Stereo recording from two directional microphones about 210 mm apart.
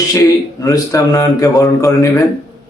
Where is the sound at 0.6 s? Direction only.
15° left (ahead or behind).